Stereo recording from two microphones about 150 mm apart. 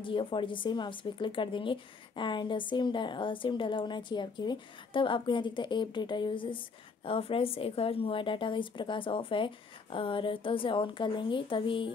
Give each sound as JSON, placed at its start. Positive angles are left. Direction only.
{"t": 0.0, "sound": "speech", "side_deg": 35}